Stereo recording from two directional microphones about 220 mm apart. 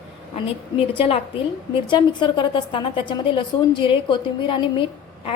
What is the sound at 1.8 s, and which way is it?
A woman's voice, 20° left (ahead or behind).